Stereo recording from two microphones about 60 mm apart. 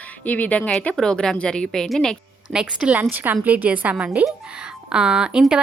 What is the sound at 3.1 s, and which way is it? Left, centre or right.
A woman's voice, right.